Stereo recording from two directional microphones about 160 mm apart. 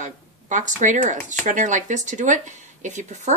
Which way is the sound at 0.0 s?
50° right (ahead or behind).